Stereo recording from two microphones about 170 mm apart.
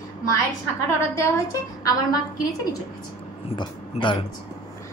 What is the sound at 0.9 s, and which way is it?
A woman's voice, 15° left (ahead or behind).